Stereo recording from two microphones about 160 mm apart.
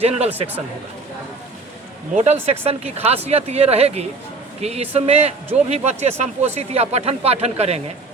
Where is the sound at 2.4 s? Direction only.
40° right (ahead or behind).